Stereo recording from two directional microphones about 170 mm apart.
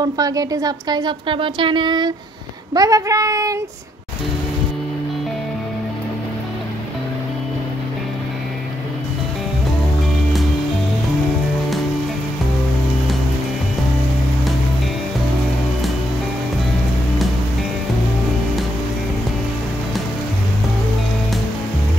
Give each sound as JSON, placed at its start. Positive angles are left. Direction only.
{"t": 0.0, "sound": "speech", "side_deg": -20}